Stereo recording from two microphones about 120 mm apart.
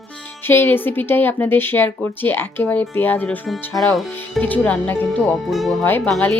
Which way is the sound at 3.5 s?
Centre (ahead or behind).